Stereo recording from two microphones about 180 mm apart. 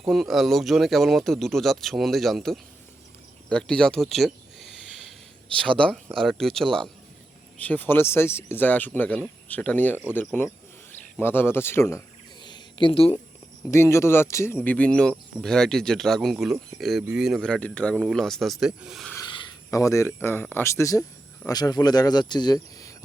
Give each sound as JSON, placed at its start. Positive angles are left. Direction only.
{"t": 0.0, "sound": "speech", "side_deg": 0}
{"t": 3.5, "sound": "a sound", "side_deg": 5}
{"t": 5.5, "sound": "speech", "side_deg": 5}
{"t": 13.7, "sound": "speech", "side_deg": 15}
{"t": 19.1, "sound": "speech", "side_deg": 25}